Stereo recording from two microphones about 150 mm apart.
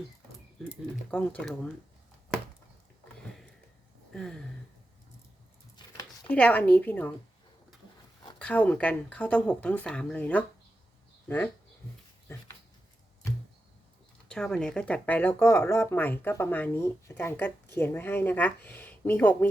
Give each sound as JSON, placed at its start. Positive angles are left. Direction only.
{"t": 1.1, "sound": "speech", "side_deg": 10}
{"t": 4.1, "sound": "a sound", "side_deg": 5}
{"t": 6.2, "sound": "speech", "side_deg": 10}
{"t": 8.4, "sound": "speech", "side_deg": 10}
{"t": 12.3, "sound": "dog", "side_deg": 15}
{"t": 14.3, "sound": "speech", "side_deg": 5}